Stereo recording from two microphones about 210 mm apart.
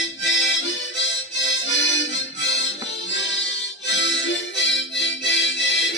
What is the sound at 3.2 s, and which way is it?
Music, 60° left (ahead or behind).